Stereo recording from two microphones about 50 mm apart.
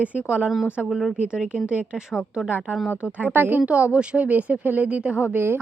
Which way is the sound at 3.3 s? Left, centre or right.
Right.